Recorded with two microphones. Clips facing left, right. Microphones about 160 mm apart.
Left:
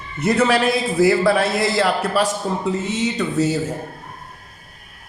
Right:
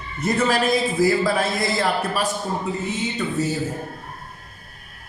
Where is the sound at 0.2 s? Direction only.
70° left (ahead or behind).